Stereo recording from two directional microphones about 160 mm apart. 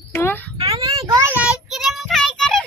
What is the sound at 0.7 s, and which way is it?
Child singing, 20° right (ahead or behind).